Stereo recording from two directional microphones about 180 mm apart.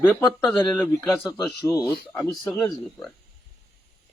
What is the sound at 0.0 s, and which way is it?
Speech, 10° left (ahead or behind).